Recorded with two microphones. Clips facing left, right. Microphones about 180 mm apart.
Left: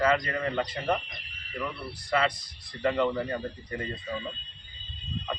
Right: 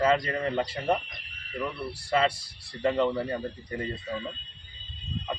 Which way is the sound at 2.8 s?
25° right (ahead or behind).